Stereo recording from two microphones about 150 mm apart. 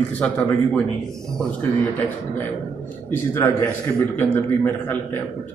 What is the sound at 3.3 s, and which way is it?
A man's voice, 15° left (ahead or behind).